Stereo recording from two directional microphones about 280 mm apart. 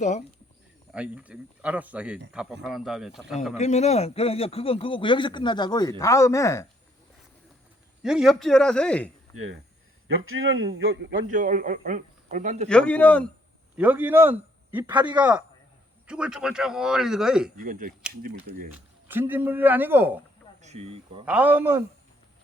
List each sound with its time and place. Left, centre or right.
0.9 s speech: centre
3.6 s a man's voice: left
8.0 s speech: centre
10.2 s speech: right
11.3 s a man's voice: right
12.6 s speech: centre
13.7 s a man's voice: centre
16.0 s speech: centre
17.6 s a man's voice: right
18.7 s a man's voice: centre
20.6 s a man's voice: right
21.2 s a man's voice: centre